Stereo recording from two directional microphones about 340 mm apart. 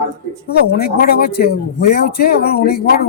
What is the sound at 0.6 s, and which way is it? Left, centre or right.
Speech, left.